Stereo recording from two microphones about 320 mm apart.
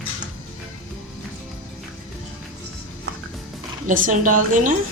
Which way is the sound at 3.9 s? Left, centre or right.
Right.